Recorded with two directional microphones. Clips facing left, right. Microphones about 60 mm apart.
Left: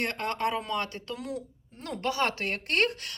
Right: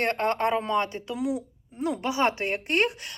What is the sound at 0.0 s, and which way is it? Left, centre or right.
Speech, right.